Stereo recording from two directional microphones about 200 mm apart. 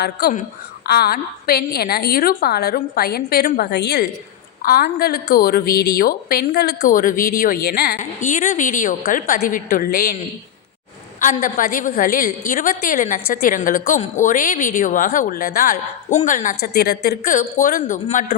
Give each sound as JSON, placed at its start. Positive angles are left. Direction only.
{"t": 0.0, "sound": "a woman's voice", "side_deg": 50}
{"t": 11.2, "sound": "a woman's voice", "side_deg": 40}